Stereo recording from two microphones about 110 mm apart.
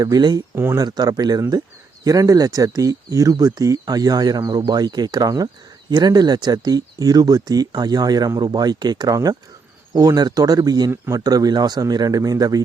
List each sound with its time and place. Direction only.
0.0 s speech: 40° right (ahead or behind)
0.5 s speech: 25° right (ahead or behind)
0.8 s speech: 35° right (ahead or behind)
10.9 s speech: 20° right (ahead or behind)
11.2 s speech: 35° right (ahead or behind)